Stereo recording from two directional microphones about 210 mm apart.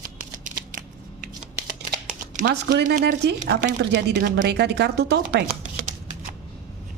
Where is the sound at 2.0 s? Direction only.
40° right (ahead or behind).